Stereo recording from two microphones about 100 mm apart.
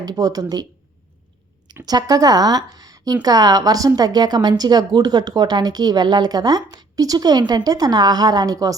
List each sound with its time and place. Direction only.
0.0 s speech: 40° right (ahead or behind)
1.8 s speech: 40° right (ahead or behind)